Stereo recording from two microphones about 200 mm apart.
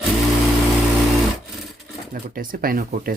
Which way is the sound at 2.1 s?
45° right (ahead or behind).